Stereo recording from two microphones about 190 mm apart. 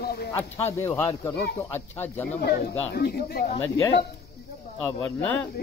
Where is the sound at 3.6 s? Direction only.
15° left (ahead or behind).